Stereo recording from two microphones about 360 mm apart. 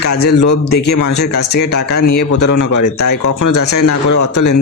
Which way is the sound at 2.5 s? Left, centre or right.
Left.